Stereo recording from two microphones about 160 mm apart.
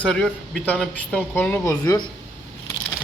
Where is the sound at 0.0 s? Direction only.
5° left (ahead or behind); by 2.0 s 20° left (ahead or behind).